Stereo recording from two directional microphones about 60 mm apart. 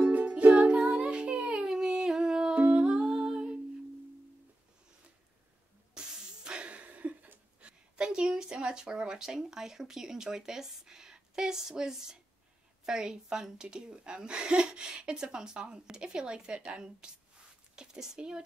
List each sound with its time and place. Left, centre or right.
0.1 s music: right
0.7 s music: centre
1.0 s music: centre
1.7 s humming: centre
5.9 s a sound: centre
7.9 s a woman's voice: centre